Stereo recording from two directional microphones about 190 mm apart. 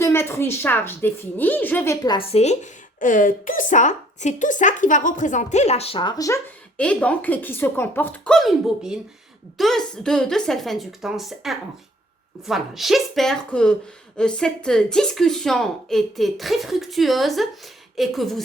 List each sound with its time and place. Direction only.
0.0 s a woman's voice: 15° left (ahead or behind)
2.1 s a woman's voice: 30° left (ahead or behind); by 18.4 s centre (ahead or behind)